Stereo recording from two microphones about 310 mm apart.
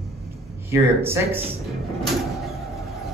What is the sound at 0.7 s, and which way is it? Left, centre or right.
Speech, centre.